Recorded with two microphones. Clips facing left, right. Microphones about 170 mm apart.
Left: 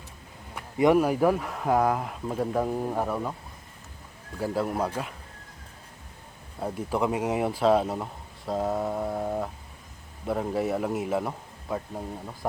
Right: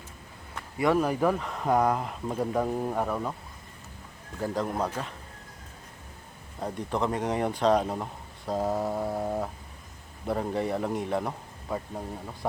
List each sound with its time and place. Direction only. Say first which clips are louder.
0.5 s speech: left 4 dB; 15° left (ahead or behind)
4.4 s speech: left 2 dB; 10° left (ahead or behind)
6.6 s speech: left 2 dB; 5° left (ahead or behind)